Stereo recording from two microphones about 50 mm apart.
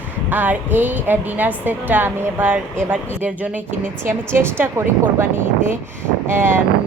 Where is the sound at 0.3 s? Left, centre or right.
Right.